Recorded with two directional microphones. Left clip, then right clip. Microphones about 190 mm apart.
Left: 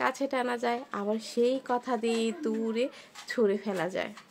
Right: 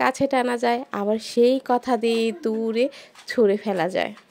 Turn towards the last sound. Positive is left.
turn(degrees=-35)  # may be behind; listen again after turning